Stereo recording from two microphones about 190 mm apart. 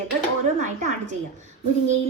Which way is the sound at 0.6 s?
40° right (ahead or behind).